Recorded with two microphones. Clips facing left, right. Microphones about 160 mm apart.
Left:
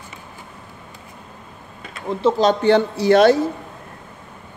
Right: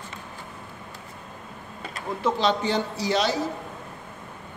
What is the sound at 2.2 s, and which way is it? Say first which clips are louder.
Speech: left 8 dB; 25° left (ahead or behind).